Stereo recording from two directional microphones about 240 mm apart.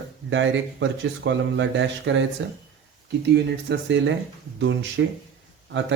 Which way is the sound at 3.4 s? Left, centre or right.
Right.